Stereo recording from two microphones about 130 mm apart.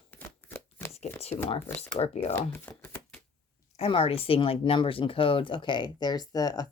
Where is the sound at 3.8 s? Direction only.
50° left (ahead or behind).